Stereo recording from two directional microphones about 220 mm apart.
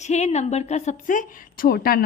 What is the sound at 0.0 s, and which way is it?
A woman's voice, 30° left (ahead or behind).